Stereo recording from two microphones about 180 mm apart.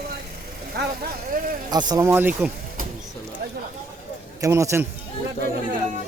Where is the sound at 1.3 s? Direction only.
55° right (ahead or behind).